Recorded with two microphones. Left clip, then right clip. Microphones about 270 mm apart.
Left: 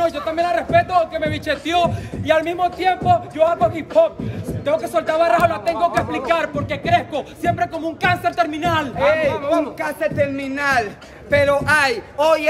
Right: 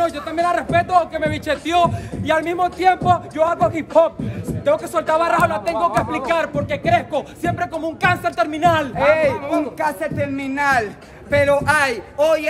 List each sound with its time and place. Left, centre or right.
0.0 s a man's voice: centre
8.9 s speech: centre
9.8 s a man's voice: centre